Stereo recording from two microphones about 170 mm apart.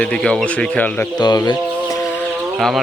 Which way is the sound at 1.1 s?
25° left (ahead or behind).